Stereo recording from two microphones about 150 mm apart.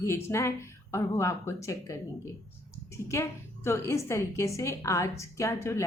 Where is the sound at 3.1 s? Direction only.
20° left (ahead or behind).